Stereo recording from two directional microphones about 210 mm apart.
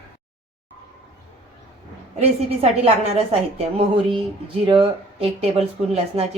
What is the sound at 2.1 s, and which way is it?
A woman's voice, 30° right (ahead or behind).